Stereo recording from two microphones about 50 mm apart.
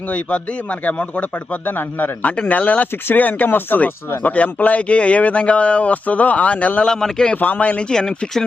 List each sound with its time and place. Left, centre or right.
0.9 s a man's voice: left
6.8 s speech: centre
7.3 s a man's voice: left
7.8 s speech: centre